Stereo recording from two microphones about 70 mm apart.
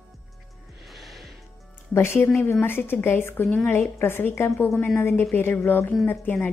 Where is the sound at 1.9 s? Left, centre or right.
Left.